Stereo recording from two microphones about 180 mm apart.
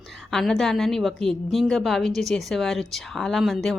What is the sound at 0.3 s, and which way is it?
A woman's voice, centre (ahead or behind).